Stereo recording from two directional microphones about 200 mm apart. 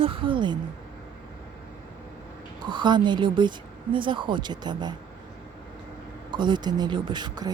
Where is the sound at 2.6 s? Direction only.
20° right (ahead or behind).